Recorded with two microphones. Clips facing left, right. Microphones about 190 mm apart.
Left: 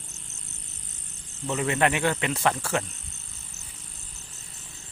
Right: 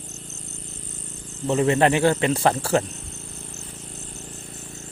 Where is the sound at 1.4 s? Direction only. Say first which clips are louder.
Right 6 dB; 35° right (ahead or behind).